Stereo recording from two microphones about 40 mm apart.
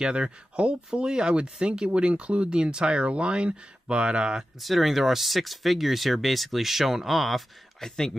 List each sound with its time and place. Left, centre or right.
0.1 s speech: right
4.6 s speech: centre